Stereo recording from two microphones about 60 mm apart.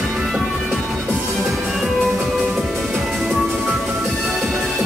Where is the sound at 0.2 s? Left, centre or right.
Centre.